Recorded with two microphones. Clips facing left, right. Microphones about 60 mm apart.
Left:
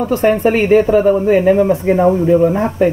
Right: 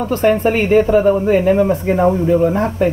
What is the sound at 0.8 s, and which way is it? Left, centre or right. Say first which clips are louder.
Speech: left 1 dB; centre.